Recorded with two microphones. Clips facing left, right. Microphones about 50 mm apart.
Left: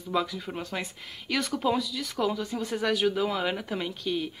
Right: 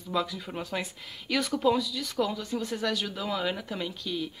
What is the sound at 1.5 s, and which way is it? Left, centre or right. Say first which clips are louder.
Speech: right 3 dB; centre.